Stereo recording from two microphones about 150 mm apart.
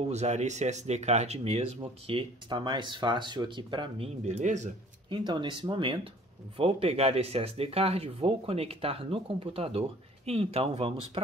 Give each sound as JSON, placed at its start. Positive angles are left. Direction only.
{"t": 0.0, "sound": "speech", "side_deg": -45}
{"t": 2.0, "sound": "speech", "side_deg": -35}
{"t": 4.2, "sound": "speech", "side_deg": -50}
{"t": 5.1, "sound": "speech", "side_deg": -30}